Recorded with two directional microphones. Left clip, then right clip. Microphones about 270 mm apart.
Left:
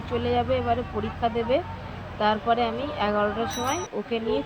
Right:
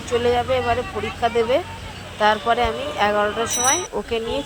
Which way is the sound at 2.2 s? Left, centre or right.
Centre.